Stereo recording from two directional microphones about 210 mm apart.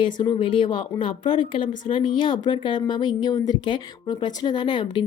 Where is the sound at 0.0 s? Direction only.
25° left (ahead or behind).